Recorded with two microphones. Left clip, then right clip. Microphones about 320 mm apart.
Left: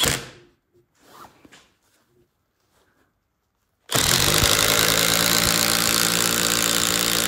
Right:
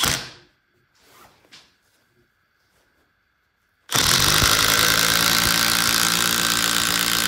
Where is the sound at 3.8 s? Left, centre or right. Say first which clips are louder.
Right 2 dB; centre.